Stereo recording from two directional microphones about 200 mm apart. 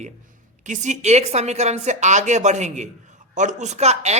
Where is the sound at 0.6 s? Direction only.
40° right (ahead or behind).